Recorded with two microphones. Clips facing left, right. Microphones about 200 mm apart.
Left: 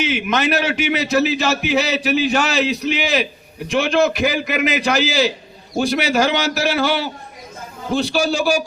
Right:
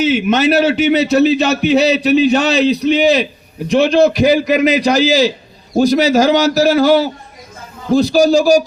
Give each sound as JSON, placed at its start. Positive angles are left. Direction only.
{"t": 0.0, "sound": "a man's voice", "side_deg": -30}